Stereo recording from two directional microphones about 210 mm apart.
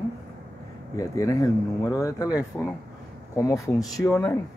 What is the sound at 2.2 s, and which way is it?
Speech, 5° right (ahead or behind).